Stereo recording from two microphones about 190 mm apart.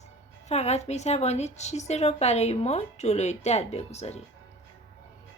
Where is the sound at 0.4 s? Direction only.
35° left (ahead or behind).